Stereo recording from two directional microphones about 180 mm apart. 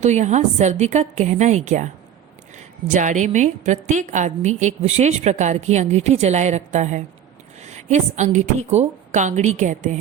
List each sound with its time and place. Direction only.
0.0 s a woman's voice: 40° right (ahead or behind)
2.9 s a woman's voice: 45° right (ahead or behind)